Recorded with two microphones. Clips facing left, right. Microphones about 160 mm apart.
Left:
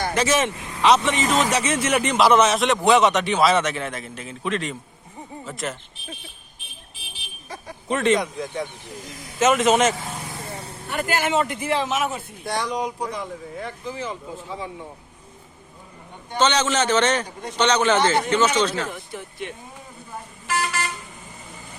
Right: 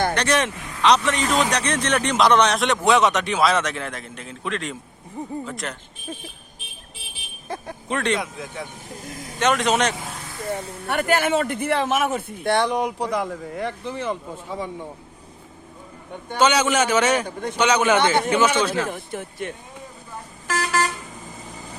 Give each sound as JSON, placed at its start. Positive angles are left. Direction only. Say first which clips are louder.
{"t": 0.1, "sound": "speech", "louder": "left 1 dB", "side_deg": 5}
{"t": 7.4, "sound": "a sound", "louder": "right 5 dB", "side_deg": -55}
{"t": 7.9, "sound": "speech", "louder": "left 4 dB", "side_deg": 0}
{"t": 10.4, "sound": "speech", "louder": "right 7 dB", "side_deg": -60}
{"t": 16.4, "sound": "a man's voice", "louder": "right 2 dB", "side_deg": -10}
{"t": 17.2, "sound": "speech", "louder": "right 5 dB", "side_deg": -55}
{"t": 17.6, "sound": "a man's voice", "louder": "even", "side_deg": -10}
{"t": 18.9, "sound": "speech", "louder": "right 4 dB", "side_deg": -55}